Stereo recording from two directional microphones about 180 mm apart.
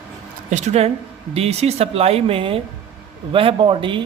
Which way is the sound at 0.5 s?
40° right (ahead or behind).